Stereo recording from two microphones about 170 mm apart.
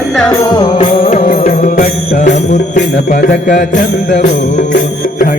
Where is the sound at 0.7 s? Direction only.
40° left (ahead or behind).